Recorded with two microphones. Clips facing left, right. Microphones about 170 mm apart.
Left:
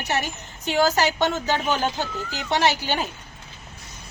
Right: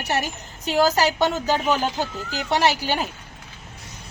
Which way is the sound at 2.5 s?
5° right (ahead or behind).